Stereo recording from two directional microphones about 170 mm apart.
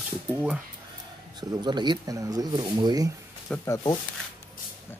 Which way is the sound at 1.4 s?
25° right (ahead or behind).